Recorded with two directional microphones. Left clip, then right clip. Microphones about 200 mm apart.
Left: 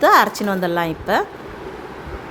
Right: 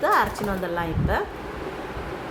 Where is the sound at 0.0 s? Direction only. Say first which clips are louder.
Left 8 dB; 50° left (ahead or behind).